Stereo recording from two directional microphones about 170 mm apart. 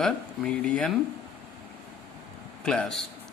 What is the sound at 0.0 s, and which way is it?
Speech, 5° left (ahead or behind).